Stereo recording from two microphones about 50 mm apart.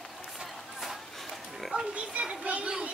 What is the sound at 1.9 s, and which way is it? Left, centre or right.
Children playing, right.